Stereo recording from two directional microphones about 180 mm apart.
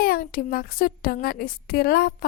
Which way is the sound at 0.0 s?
55° left (ahead or behind).